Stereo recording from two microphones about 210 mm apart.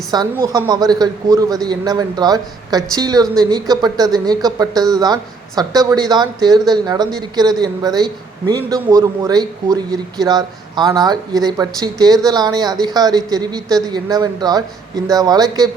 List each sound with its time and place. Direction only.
0.1 s a man's voice: 20° right (ahead or behind)